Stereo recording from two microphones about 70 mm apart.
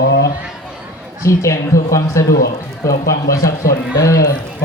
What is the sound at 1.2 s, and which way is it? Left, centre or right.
A man's voice, left.